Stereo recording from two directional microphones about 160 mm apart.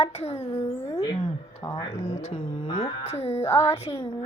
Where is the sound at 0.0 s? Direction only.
40° left (ahead or behind).